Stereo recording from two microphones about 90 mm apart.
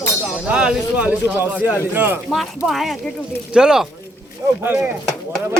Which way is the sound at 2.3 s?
Centre (ahead or behind).